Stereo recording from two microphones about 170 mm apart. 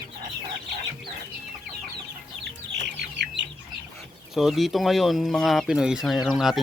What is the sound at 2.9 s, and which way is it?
Chicken, 90° right.